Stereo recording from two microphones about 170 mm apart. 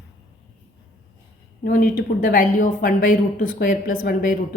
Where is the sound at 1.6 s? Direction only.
55° left (ahead or behind).